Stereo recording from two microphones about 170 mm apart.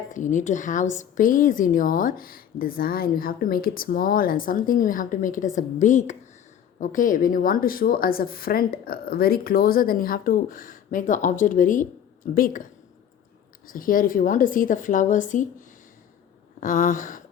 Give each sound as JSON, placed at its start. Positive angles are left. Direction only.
{"t": 0.1, "sound": "a woman's voice", "side_deg": 50}
{"t": 13.7, "sound": "a woman's voice", "side_deg": 55}